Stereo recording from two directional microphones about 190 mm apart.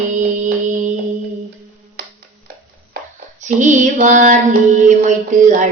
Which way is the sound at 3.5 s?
40° right (ahead or behind).